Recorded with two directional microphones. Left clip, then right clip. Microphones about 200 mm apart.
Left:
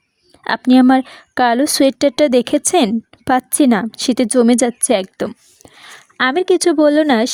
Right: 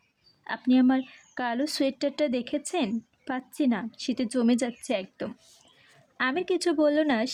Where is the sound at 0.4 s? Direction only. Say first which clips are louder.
Left 12 dB; 50° left (ahead or behind).